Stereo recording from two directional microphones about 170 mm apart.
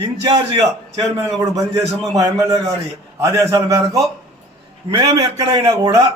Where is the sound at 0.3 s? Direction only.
25° right (ahead or behind).